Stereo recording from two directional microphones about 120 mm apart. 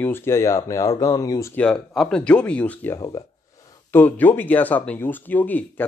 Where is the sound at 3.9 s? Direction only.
15° left (ahead or behind).